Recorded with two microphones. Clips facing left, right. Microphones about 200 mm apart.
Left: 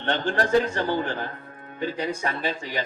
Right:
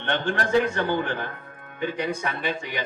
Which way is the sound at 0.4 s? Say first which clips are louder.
Even; 60° right (ahead or behind).